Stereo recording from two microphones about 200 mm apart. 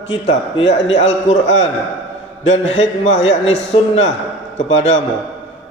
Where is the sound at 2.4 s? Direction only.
70° left (ahead or behind).